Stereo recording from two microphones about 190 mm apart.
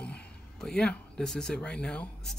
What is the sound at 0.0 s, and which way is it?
Speech, 5° left (ahead or behind).